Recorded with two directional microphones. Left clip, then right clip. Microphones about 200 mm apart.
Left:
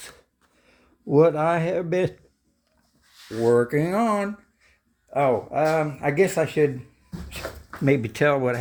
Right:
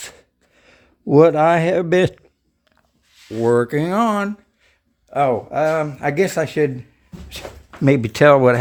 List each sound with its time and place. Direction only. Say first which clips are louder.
0.0 s a sound: right 7 dB; 55° right (ahead or behind)
3.4 s speech: right 3 dB; 30° right (ahead or behind)
7.9 s speech: right 8 dB; 45° right (ahead or behind)